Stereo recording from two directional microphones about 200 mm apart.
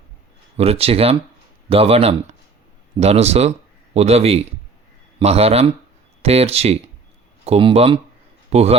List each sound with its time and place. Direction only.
0.5 s speech: 30° right (ahead or behind)